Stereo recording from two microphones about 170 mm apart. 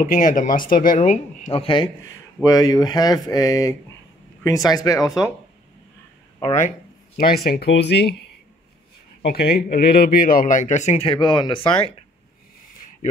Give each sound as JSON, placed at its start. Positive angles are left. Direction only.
{"t": 0.0, "sound": "a man's voice", "side_deg": 50}
{"t": 2.4, "sound": "speech", "side_deg": 20}
{"t": 7.2, "sound": "speech", "side_deg": 60}
{"t": 9.2, "sound": "a man's voice", "side_deg": 70}